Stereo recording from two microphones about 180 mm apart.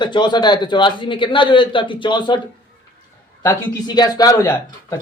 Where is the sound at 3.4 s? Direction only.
25° left (ahead or behind).